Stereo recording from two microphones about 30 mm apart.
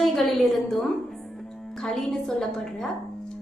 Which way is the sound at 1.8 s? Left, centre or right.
Left.